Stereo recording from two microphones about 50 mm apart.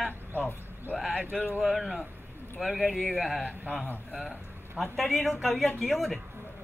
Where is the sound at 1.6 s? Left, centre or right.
Centre.